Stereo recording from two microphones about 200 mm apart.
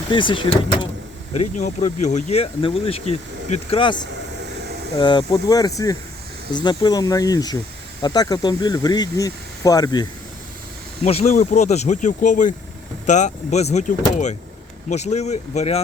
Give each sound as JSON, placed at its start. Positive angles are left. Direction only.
{"t": 0.1, "sound": "speech", "side_deg": 25}
{"t": 1.3, "sound": "speech", "side_deg": 35}
{"t": 11.0, "sound": "speech", "side_deg": 35}